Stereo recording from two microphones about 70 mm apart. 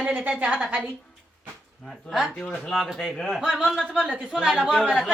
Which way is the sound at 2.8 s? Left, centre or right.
Centre.